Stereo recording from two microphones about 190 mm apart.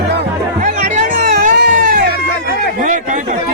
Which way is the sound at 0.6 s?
40° right (ahead or behind).